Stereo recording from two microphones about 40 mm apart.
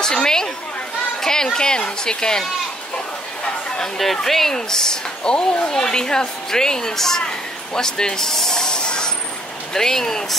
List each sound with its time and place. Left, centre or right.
0.0 s chatter: centre
1.2 s a woman's voice: centre
3.7 s a woman's voice: centre